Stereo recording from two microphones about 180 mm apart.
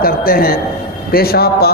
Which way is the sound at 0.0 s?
55° left (ahead or behind).